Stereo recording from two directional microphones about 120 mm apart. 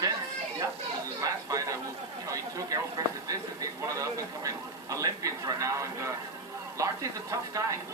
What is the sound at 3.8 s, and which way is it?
Speech, 25° right (ahead or behind).